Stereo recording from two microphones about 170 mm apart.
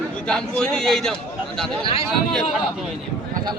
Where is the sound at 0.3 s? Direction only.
5° left (ahead or behind).